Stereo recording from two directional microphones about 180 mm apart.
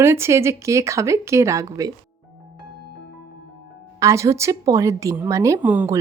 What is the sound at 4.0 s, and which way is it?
Speech, 15° right (ahead or behind).